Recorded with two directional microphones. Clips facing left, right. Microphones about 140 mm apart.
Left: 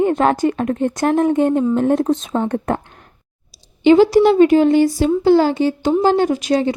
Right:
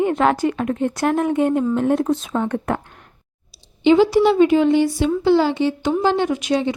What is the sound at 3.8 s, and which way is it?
A woman's voice, 45° left (ahead or behind).